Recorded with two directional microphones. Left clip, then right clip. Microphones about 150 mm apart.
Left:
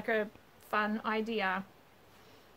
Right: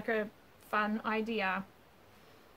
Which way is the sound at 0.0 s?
30° left (ahead or behind).